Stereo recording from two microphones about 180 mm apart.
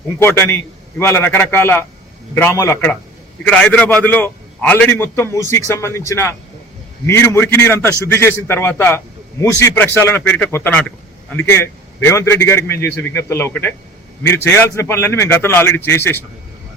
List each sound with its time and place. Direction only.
0.2 s a man's voice: 15° left (ahead or behind)